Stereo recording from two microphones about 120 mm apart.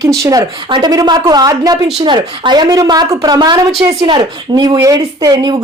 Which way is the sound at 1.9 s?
45° right (ahead or behind).